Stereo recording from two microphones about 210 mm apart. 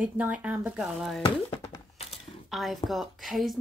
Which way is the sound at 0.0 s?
5° right (ahead or behind).